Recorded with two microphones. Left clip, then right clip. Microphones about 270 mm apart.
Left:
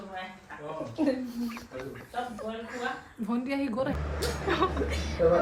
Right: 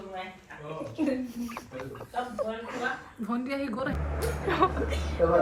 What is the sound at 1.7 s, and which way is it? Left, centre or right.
A woman's voice, centre.